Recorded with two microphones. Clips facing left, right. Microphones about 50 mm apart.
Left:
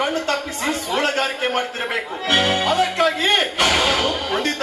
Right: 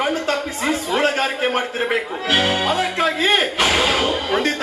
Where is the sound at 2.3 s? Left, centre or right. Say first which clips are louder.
Even; centre.